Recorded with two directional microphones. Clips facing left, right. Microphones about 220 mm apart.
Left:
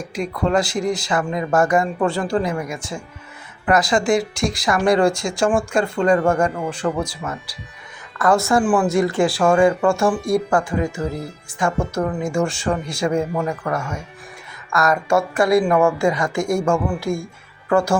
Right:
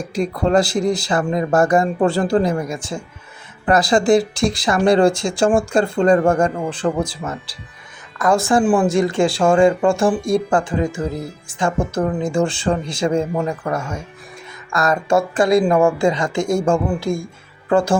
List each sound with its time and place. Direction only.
0.1 s speech: 35° right (ahead or behind)
8.2 s speech: 15° right (ahead or behind)
16.4 s speech: centre (ahead or behind)
16.6 s speech: 30° right (ahead or behind)